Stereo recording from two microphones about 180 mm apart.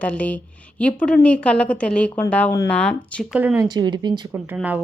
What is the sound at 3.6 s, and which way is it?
Speech, 20° right (ahead or behind).